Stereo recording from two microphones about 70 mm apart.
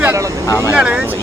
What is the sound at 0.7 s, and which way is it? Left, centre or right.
Speech, centre.